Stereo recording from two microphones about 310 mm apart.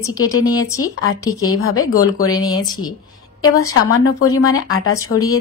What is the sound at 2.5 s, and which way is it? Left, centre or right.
Speech, centre.